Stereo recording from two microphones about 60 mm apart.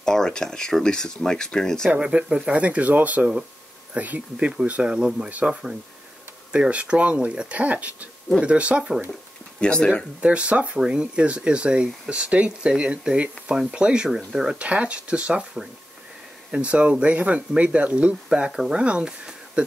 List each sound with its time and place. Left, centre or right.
0.0 s speech: centre
1.9 s speech: centre
5.3 s speech: right
9.6 s speech: centre
10.2 s speech: centre
14.6 s speech: centre